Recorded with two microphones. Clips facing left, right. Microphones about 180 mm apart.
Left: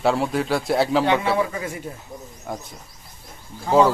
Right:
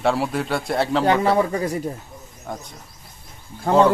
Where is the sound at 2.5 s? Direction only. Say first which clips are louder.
Left 1 dB; 5° left (ahead or behind).